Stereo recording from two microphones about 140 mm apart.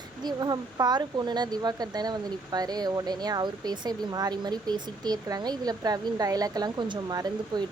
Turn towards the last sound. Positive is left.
turn(degrees=-30)  # may be behind; listen again after turning